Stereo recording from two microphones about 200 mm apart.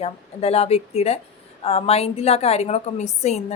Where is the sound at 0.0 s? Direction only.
30° left (ahead or behind).